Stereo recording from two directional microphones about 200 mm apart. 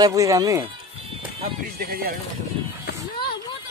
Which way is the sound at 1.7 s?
50° right (ahead or behind).